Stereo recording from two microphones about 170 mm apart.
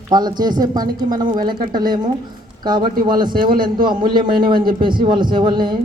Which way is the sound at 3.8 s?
25° right (ahead or behind).